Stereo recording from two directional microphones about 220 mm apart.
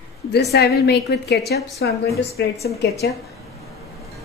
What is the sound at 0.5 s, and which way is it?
A woman's voice, 45° left (ahead or behind).